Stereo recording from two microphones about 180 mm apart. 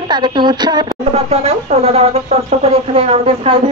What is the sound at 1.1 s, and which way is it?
Speech, 35° right (ahead or behind).